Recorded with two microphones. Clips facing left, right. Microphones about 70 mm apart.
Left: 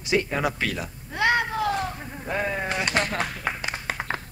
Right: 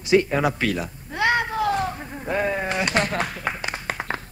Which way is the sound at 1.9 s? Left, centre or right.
Centre.